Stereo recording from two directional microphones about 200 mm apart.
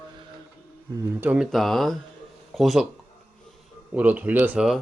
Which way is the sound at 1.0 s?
5° right (ahead or behind).